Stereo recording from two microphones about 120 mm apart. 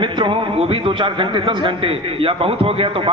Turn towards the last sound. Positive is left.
turn(degrees=-50)  # may be behind; listen again after turning